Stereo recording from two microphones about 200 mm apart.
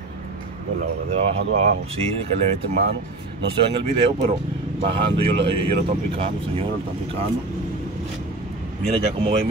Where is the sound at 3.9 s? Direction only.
25° right (ahead or behind).